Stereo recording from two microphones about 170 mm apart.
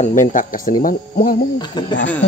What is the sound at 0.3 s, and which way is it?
Speech, 50° left (ahead or behind).